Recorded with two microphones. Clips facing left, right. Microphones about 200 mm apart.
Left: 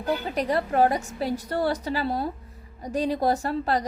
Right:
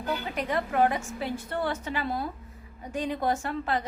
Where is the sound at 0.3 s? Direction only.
35° left (ahead or behind).